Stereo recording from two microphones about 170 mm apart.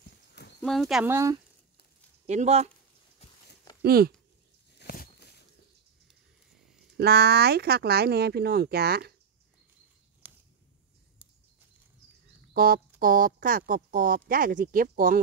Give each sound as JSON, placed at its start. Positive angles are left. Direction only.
{"t": 0.6, "sound": "speech", "side_deg": 0}
{"t": 1.0, "sound": "speech", "side_deg": -15}
{"t": 2.2, "sound": "speech", "side_deg": -40}
{"t": 3.8, "sound": "speech", "side_deg": -60}
{"t": 4.7, "sound": "a sound", "side_deg": 65}
{"t": 7.0, "sound": "speech", "side_deg": -65}
{"t": 10.2, "sound": "a sound", "side_deg": -10}
{"t": 12.5, "sound": "speech", "side_deg": -60}